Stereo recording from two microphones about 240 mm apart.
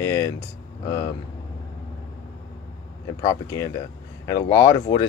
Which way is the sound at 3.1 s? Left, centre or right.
Centre.